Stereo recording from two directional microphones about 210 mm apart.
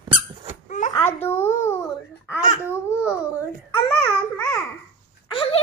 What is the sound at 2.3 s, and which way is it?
Babbling, 10° left (ahead or behind).